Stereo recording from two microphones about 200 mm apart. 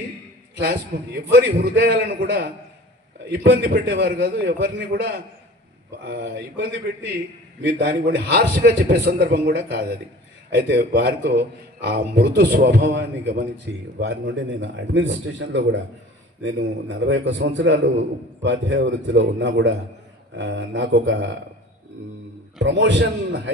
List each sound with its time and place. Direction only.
0.6 s a man's voice: 55° right (ahead or behind)
22.6 s a man's voice: 65° right (ahead or behind)